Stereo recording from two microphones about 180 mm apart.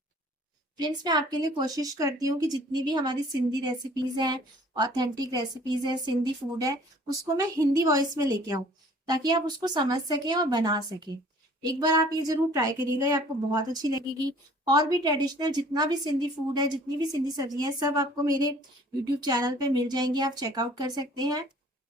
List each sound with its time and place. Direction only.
0.8 s speech: 25° right (ahead or behind)
7.3 s speech: 20° right (ahead or behind)